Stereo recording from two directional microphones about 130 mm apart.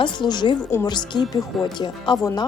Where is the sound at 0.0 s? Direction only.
35° left (ahead or behind).